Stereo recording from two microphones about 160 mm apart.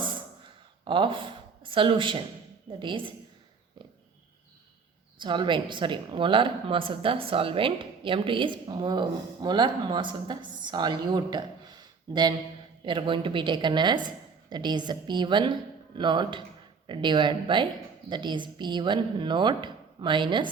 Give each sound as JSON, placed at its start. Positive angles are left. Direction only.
{"t": 0.0, "sound": "a sound", "side_deg": -30}
{"t": 2.7, "sound": "a woman's voice", "side_deg": -30}
{"t": 5.2, "sound": "speech", "side_deg": -30}